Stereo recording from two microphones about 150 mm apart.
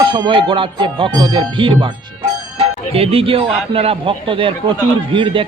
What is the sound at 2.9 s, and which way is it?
Speech, 40° right (ahead or behind).